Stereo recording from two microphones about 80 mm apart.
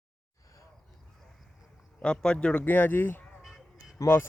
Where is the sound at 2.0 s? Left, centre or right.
Centre.